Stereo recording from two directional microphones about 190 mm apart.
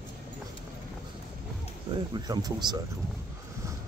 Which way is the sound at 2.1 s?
20° right (ahead or behind).